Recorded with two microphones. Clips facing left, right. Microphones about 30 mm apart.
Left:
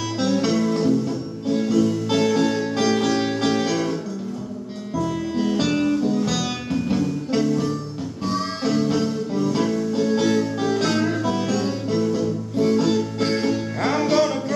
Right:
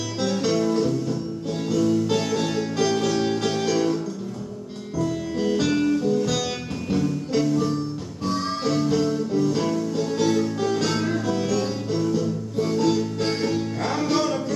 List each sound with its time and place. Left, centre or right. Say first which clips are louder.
0.2 s music: left 2 dB; centre
5.4 s music: even; centre